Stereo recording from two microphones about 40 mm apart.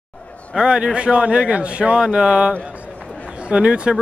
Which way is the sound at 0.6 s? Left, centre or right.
Right.